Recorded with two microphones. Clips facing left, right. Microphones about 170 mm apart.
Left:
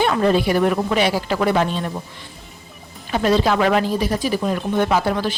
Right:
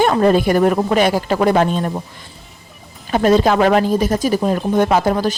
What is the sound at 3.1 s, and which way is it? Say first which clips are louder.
A woman's voice: right 4 dB; 45° right (ahead or behind).